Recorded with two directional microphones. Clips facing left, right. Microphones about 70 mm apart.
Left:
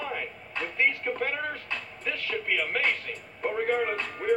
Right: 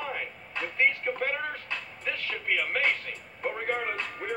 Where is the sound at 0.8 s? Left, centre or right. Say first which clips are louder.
Even; right.